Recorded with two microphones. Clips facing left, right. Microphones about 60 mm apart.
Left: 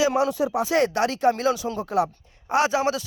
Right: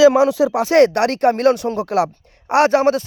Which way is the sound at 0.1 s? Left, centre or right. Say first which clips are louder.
Right 7 dB; right.